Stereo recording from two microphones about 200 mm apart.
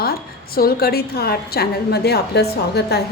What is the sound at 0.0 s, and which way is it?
A woman's voice, 50° left (ahead or behind).